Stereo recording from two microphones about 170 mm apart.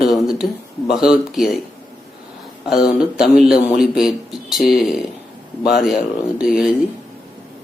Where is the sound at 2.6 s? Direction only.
5° right (ahead or behind).